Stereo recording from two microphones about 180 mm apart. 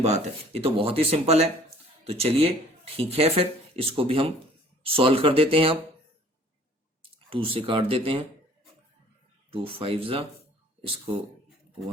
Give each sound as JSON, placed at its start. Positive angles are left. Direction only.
{"t": 0.0, "sound": "speech", "side_deg": -35}
{"t": 7.3, "sound": "speech", "side_deg": -30}
{"t": 9.5, "sound": "speech", "side_deg": -30}